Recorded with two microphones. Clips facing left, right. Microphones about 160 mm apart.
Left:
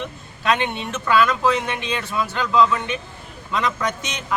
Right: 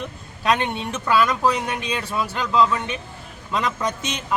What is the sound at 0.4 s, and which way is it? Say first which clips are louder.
Speech: even; 40° right (ahead or behind).